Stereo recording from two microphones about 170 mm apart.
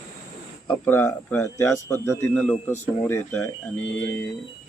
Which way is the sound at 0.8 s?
15° left (ahead or behind).